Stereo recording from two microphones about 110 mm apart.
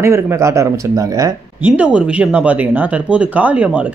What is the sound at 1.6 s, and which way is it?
Speech, 10° right (ahead or behind).